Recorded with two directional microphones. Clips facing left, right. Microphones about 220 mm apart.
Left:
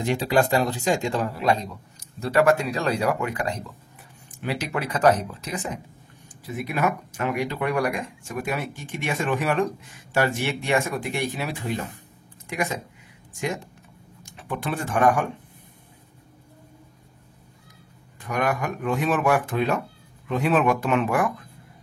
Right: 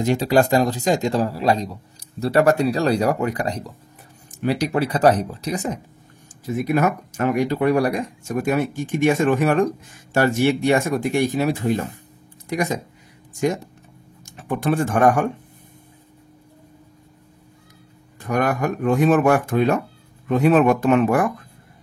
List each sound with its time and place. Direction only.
0.0 s a man's voice: 40° right (ahead or behind)
14.2 s speech: 45° right (ahead or behind)
18.2 s speech: 45° right (ahead or behind)